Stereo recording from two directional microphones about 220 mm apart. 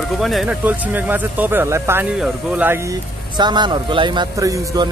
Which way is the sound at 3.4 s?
20° right (ahead or behind).